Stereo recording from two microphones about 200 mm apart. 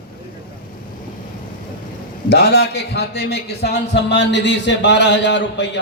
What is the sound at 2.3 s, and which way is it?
A man's voice, 55° left (ahead or behind).